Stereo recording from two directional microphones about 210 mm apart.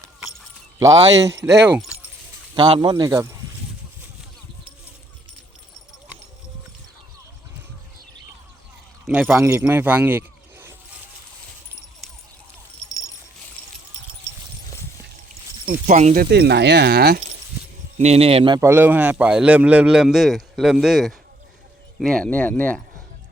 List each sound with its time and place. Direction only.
0.8 s speech: 20° right (ahead or behind)
2.6 s speech: 20° right (ahead or behind)
9.0 s speech: 5° right (ahead or behind)
15.9 s speech: 35° right (ahead or behind)
16.2 s speech: 50° right (ahead or behind)
17.9 s speech: 30° right (ahead or behind); by 22.8 s 10° left (ahead or behind)